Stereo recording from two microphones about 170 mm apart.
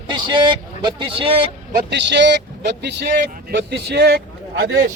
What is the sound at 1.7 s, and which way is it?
A man's voice, 90° right.